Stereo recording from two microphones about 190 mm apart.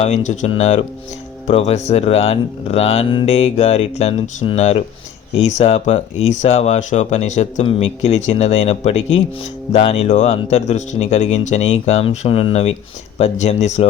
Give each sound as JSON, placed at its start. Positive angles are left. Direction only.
{"t": 0.0, "sound": "speech", "side_deg": 40}
{"t": 9.0, "sound": "speech", "side_deg": 90}
{"t": 9.7, "sound": "speech", "side_deg": 30}